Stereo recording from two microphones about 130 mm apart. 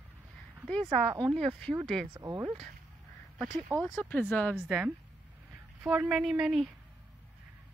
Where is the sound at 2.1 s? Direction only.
30° right (ahead or behind).